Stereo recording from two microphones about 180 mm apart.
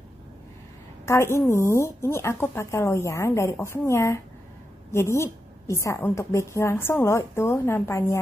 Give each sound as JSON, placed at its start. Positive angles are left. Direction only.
{"t": 1.0, "sound": "a woman's voice", "side_deg": 15}